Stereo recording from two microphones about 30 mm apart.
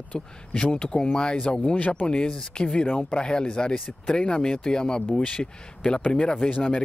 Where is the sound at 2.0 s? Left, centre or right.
Left.